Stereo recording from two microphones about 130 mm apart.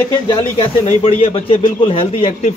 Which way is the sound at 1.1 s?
55° left (ahead or behind).